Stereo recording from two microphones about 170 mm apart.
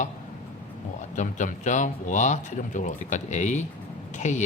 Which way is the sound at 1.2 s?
45° left (ahead or behind).